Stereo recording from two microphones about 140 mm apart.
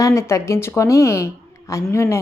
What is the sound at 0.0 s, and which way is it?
A woman's voice, 20° left (ahead or behind).